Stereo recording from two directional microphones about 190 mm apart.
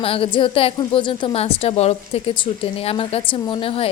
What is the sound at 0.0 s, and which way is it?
Speech, 30° left (ahead or behind).